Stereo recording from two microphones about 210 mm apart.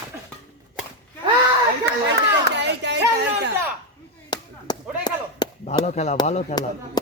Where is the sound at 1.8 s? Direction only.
55° right (ahead or behind).